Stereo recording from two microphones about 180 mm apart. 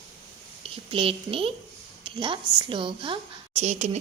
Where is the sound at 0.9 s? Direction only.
30° right (ahead or behind).